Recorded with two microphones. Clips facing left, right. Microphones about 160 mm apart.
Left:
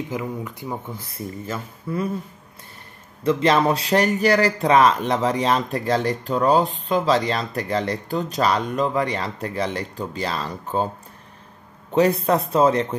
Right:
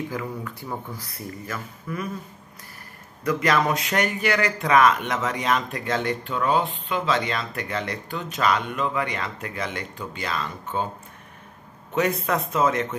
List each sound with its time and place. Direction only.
0.1 s speech: 20° left (ahead or behind)
3.3 s speech: 30° left (ahead or behind)
11.9 s speech: 35° left (ahead or behind)